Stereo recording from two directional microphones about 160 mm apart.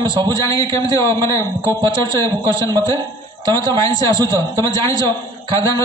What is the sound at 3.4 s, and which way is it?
A man's voice, 20° left (ahead or behind).